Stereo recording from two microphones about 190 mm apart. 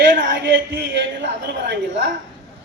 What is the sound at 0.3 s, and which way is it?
A man's voice, 65° right (ahead or behind).